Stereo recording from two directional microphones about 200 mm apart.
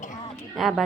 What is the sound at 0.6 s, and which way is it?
Speech, centre (ahead or behind).